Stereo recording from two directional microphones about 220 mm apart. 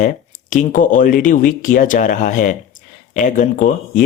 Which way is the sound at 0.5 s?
35° left (ahead or behind).